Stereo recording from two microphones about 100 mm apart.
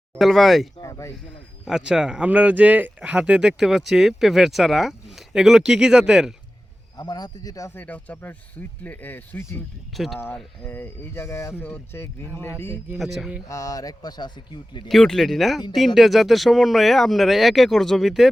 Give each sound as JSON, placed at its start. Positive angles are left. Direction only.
{"t": 0.2, "sound": "speech", "side_deg": 0}
{"t": 0.8, "sound": "speech", "side_deg": 30}
{"t": 1.6, "sound": "speech", "side_deg": -5}
{"t": 6.9, "sound": "speech", "side_deg": 45}
{"t": 7.7, "sound": "speech", "side_deg": 15}
{"t": 9.9, "sound": "speech", "side_deg": 0}
{"t": 10.7, "sound": "speech", "side_deg": 25}
{"t": 13.0, "sound": "speech", "side_deg": 0}
{"t": 13.5, "sound": "a man's voice", "side_deg": 35}
{"t": 14.8, "sound": "speech", "side_deg": 5}